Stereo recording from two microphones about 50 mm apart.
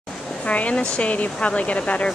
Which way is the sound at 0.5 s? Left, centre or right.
Left.